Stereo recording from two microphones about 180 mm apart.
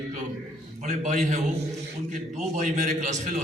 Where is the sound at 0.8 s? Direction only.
45° right (ahead or behind).